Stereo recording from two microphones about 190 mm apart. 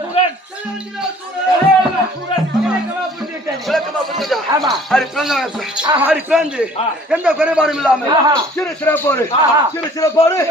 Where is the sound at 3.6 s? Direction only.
Centre (ahead or behind).